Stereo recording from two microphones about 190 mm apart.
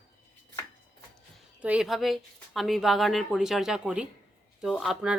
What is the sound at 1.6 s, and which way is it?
A woman's voice, 5° right (ahead or behind).